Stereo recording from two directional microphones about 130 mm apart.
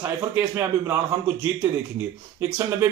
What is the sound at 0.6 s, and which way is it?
Speech, 20° right (ahead or behind).